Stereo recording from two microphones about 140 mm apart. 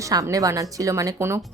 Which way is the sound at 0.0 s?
25° right (ahead or behind).